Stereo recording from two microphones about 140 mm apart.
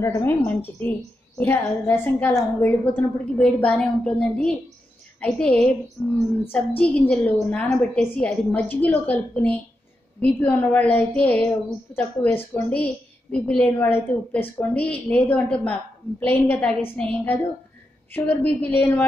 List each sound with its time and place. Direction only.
0.0 s a woman's voice: 20° left (ahead or behind)
6.8 s a woman's voice: 10° left (ahead or behind)